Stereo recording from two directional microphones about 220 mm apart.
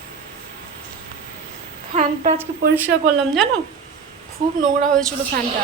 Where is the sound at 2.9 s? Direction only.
50° right (ahead or behind).